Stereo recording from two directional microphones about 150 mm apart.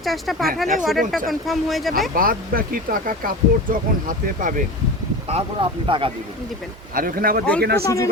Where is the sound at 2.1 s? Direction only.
70° right (ahead or behind).